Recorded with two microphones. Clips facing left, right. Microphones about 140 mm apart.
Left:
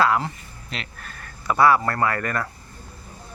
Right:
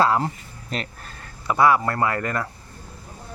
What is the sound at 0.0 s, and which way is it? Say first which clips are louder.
Speech: right 1 dB; 30° right (ahead or behind).